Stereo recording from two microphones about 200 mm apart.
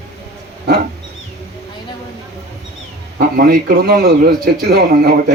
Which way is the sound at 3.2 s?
45° right (ahead or behind).